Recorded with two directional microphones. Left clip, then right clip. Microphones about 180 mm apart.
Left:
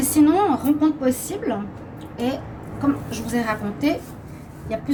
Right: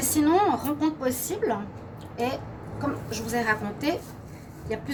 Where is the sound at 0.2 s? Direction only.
55° right (ahead or behind).